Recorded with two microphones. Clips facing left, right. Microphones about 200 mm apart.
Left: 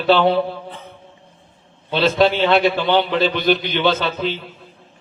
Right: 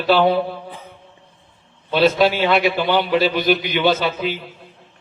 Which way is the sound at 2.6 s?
5° right (ahead or behind).